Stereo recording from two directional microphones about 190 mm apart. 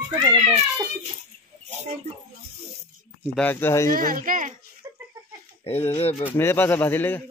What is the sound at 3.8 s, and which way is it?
Speech, 45° right (ahead or behind).